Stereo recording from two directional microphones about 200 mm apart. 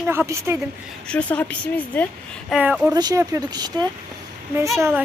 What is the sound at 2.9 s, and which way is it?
Speech, 20° right (ahead or behind).